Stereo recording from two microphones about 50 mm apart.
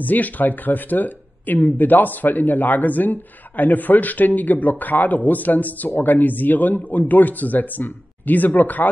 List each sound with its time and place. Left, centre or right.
0.0 s speech: left